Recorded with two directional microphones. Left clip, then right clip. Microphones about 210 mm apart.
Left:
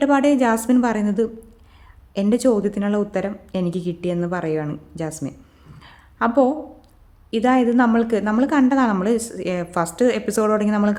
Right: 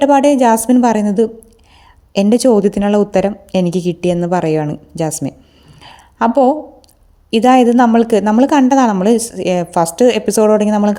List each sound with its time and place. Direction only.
0.0 s a woman's voice: 25° right (ahead or behind)
5.8 s a sound: 35° right (ahead or behind)
7.3 s a woman's voice: 35° right (ahead or behind)